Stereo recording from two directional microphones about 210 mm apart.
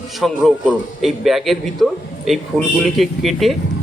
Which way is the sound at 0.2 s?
Centre (ahead or behind).